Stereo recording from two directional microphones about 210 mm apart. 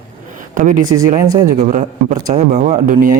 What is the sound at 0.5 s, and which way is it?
Speech, 40° right (ahead or behind).